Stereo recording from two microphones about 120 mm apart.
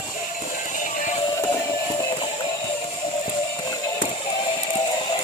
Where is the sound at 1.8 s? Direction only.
40° left (ahead or behind).